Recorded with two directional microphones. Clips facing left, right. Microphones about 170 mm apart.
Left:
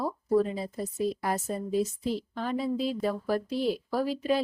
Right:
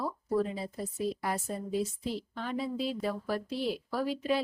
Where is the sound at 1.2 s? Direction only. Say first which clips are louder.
Left 4 dB; 40° left (ahead or behind).